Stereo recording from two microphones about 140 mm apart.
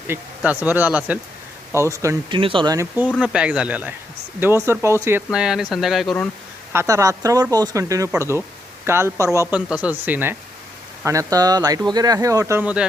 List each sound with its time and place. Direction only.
0.1 s speech: 10° right (ahead or behind)
1.7 s speech: 20° right (ahead or behind)
2.3 s speech: 40° right (ahead or behind)
3.2 s speech: 5° right (ahead or behind)
5.3 s speech: 5° right (ahead or behind)
6.7 s speech: 25° right (ahead or behind)
9.5 s speech: 10° right (ahead or behind)